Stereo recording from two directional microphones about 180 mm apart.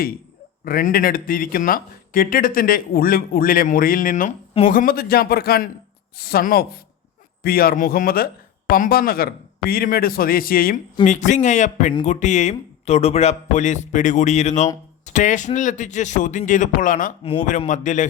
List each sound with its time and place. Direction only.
0.6 s speech: 50° left (ahead or behind)
11.0 s speech: 40° left (ahead or behind)